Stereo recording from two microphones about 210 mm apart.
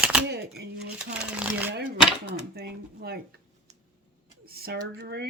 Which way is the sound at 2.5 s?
50° right (ahead or behind).